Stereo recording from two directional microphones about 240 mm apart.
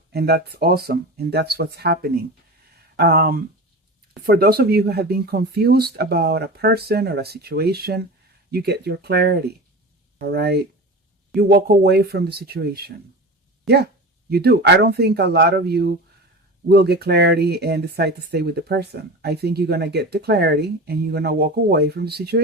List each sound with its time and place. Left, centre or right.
0.1 s speech: right
14.3 s speech: right